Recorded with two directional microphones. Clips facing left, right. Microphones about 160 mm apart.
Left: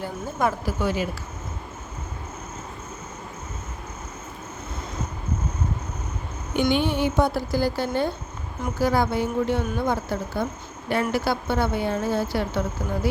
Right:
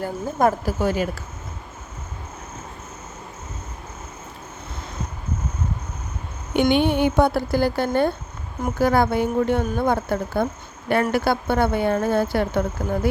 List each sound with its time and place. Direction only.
0.0 s speech: 45° right (ahead or behind)
6.6 s a woman's voice: 60° right (ahead or behind)